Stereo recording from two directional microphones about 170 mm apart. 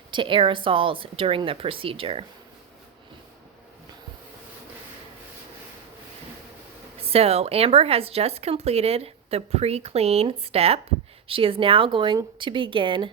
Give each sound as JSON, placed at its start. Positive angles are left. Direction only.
{"t": 0.1, "sound": "speech", "side_deg": -30}
{"t": 7.0, "sound": "speech", "side_deg": -35}